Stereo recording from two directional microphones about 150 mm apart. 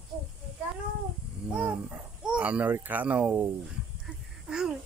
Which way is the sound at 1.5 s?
10° right (ahead or behind).